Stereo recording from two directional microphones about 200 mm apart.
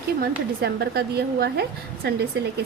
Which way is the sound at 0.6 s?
55° right (ahead or behind).